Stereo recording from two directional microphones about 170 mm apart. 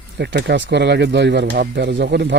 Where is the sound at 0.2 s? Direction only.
80° right.